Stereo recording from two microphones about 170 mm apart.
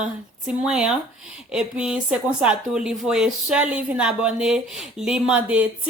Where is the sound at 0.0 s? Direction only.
5° right (ahead or behind).